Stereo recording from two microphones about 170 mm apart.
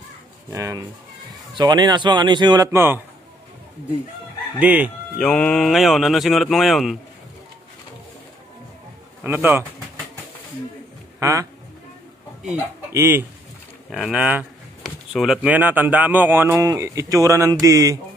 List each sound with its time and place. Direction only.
0.5 s speech: 20° right (ahead or behind)
4.6 s speech: 10° right (ahead or behind)
5.2 s speech: 5° left (ahead or behind)
9.2 s speech: 10° right (ahead or behind)
11.1 s speech: 20° right (ahead or behind)
12.9 s speech: 15° right (ahead or behind)
13.9 s speech: 5° right (ahead or behind); by 17.9 s 20° right (ahead or behind)